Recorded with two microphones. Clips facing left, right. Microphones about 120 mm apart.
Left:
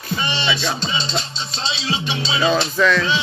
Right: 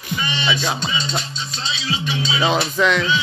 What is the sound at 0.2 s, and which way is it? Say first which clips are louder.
Music: even; 30° left (ahead or behind).